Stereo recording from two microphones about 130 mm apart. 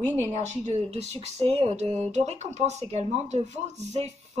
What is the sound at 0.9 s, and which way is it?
A woman's voice, 55° right (ahead or behind).